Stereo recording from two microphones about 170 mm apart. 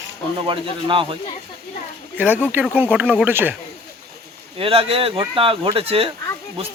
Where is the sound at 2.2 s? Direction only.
10° right (ahead or behind).